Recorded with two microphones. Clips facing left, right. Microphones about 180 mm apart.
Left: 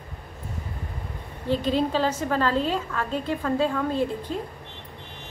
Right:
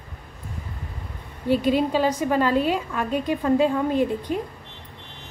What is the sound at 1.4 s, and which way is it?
A woman's voice, 10° right (ahead or behind).